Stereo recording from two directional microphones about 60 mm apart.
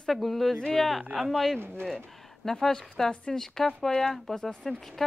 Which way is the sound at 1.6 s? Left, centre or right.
Right.